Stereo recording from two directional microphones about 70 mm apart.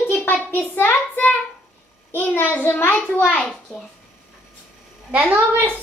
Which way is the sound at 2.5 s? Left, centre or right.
Left.